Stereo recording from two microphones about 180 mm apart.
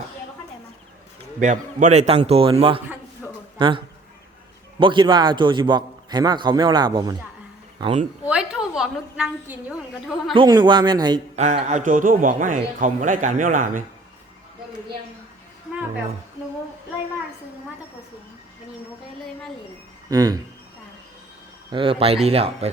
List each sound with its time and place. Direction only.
1.4 s a man's voice: 45° right (ahead or behind)
8.2 s a woman's voice: 5° right (ahead or behind)
10.3 s a man's voice: 25° right (ahead or behind)
11.3 s a man's voice: 40° right (ahead or behind)
20.1 s a man's voice: 20° right (ahead or behind)
21.7 s a man's voice: 30° right (ahead or behind)